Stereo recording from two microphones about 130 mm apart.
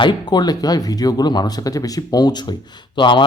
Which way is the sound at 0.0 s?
35° left (ahead or behind).